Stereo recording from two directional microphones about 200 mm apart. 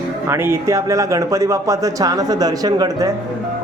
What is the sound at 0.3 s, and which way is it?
Speech, 10° right (ahead or behind).